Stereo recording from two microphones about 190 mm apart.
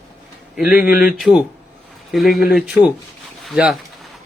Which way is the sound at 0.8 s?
50° left (ahead or behind).